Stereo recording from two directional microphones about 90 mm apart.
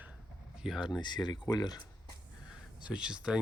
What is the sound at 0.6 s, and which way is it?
Speech, 5° right (ahead or behind).